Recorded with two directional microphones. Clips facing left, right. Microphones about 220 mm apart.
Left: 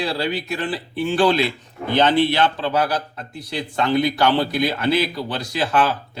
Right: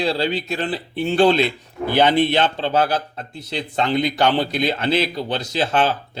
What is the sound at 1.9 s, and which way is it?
A man's voice, 15° right (ahead or behind).